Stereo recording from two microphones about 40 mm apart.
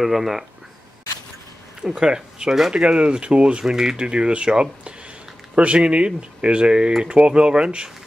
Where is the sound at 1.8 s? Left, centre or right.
Centre.